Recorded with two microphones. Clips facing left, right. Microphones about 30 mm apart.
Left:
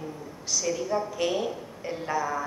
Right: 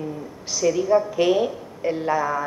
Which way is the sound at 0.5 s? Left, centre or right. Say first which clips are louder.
Right 9 dB; centre.